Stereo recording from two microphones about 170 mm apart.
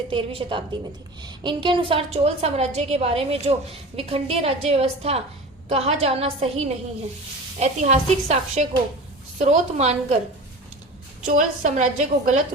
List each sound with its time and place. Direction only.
0.1 s a woman's voice: 30° right (ahead or behind)
11.3 s a woman's voice: 50° right (ahead or behind)